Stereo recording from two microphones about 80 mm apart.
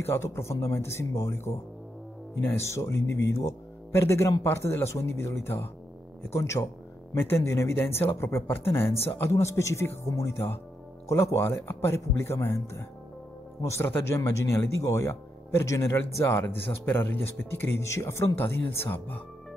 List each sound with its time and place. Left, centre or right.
0.0 s speech: left
16.3 s a man's voice: left